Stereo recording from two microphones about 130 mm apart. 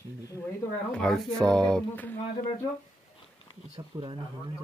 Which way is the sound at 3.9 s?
25° right (ahead or behind).